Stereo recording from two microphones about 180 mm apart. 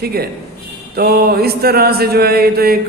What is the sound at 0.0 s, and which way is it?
A man's voice, 60° right (ahead or behind).